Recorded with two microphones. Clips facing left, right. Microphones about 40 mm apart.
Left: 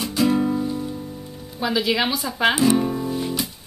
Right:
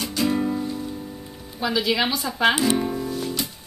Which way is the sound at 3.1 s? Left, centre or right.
Centre.